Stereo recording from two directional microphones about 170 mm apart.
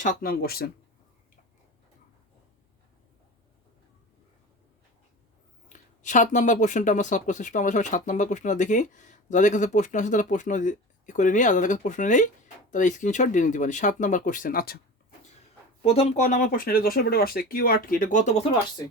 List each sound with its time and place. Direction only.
0.0 s speech: 55° left (ahead or behind)
5.6 s speech: 45° left (ahead or behind)
15.8 s speech: 35° left (ahead or behind)
16.2 s speech: 50° left (ahead or behind)